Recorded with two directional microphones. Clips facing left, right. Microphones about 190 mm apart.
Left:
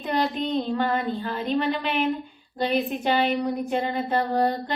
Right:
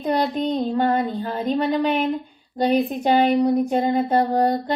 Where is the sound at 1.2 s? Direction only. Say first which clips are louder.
Right 3 dB; 40° right (ahead or behind).